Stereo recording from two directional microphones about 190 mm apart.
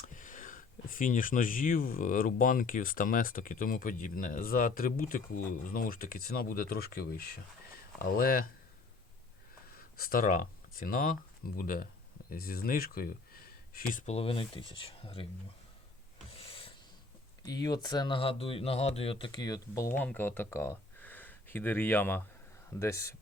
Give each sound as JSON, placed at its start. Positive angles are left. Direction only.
{"t": 0.1, "sound": "speech", "side_deg": 45}
{"t": 9.7, "sound": "speech", "side_deg": 50}
{"t": 16.4, "sound": "rub", "side_deg": 30}
{"t": 17.4, "sound": "speech", "side_deg": 20}